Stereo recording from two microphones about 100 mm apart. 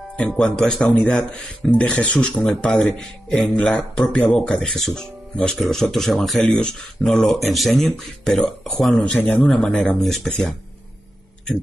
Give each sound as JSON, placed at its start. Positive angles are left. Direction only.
{"t": 0.4, "sound": "speech", "side_deg": 5}
{"t": 9.1, "sound": "speech", "side_deg": 15}
{"t": 9.5, "sound": "speech", "side_deg": 5}